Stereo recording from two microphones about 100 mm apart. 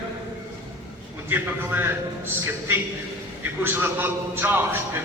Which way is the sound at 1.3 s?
20° right (ahead or behind).